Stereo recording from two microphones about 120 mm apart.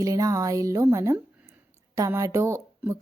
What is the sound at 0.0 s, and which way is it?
A woman's voice, 30° right (ahead or behind).